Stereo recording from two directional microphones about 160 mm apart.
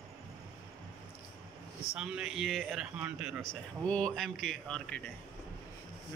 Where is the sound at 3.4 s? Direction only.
5° left (ahead or behind).